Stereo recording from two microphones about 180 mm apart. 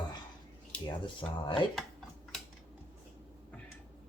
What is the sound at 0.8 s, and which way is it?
Speech, 25° left (ahead or behind).